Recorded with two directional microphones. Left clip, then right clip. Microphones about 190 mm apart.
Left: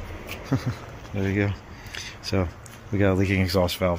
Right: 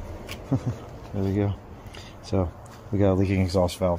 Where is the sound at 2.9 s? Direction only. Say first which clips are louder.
Even; 5° right (ahead or behind).